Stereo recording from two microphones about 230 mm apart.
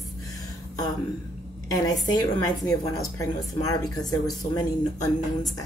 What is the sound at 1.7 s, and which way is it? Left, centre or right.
Speech, centre.